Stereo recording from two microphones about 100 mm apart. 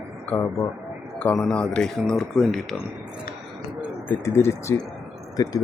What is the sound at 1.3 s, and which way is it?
Speech, 5° left (ahead or behind).